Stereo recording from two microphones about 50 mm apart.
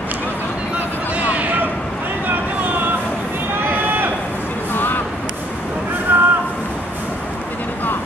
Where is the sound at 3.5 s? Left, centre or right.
Right.